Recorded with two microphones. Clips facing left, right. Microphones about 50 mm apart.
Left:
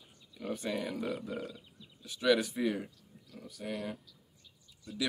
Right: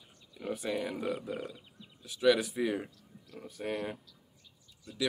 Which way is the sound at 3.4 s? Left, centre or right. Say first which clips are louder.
Right 4 dB; right.